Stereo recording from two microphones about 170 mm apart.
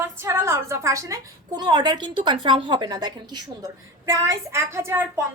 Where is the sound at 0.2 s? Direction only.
15° right (ahead or behind).